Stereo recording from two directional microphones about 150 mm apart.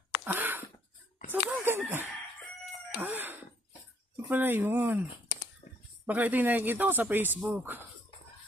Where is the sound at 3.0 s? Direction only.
15° right (ahead or behind).